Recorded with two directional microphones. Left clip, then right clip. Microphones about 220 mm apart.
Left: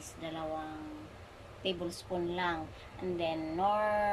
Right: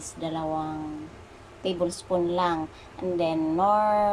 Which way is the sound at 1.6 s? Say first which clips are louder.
Right 9 dB; 15° right (ahead or behind).